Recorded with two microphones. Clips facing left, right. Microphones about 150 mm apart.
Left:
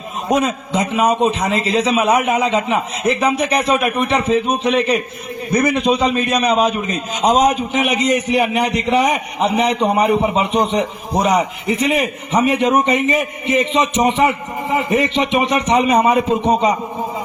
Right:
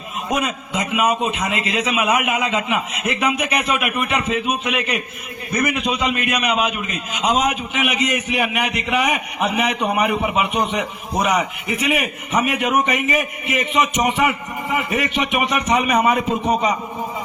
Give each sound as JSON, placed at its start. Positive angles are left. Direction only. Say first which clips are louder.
{"t": 0.3, "sound": "a man's voice", "louder": "left 6 dB", "side_deg": 30}